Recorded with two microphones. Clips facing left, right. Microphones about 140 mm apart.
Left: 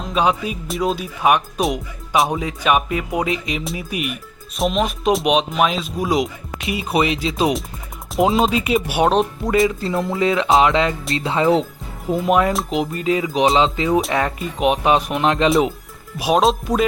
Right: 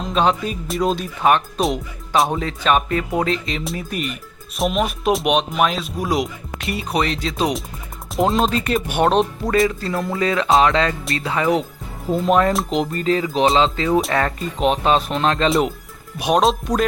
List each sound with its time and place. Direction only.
0.0 s speech: 5° left (ahead or behind)
2.4 s speech: 10° left (ahead or behind)
4.5 s speech: 5° right (ahead or behind)
9.6 s speech: 20° left (ahead or behind)
12.0 s speech: 10° left (ahead or behind)
15.4 s speech: centre (ahead or behind)